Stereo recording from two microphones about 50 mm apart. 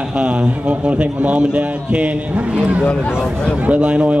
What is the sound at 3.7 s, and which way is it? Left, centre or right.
Speech, right.